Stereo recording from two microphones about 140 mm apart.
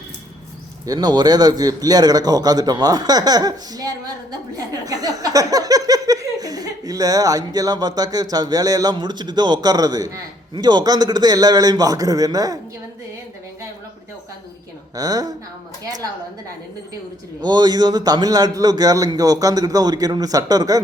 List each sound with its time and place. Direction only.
0.9 s a man's voice: 30° right (ahead or behind)
14.9 s a man's voice: 25° right (ahead or behind)
17.4 s a man's voice: 30° right (ahead or behind)